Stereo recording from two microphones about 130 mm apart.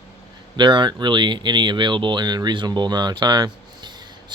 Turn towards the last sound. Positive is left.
turn(degrees=-35)  # may be behind; listen again after turning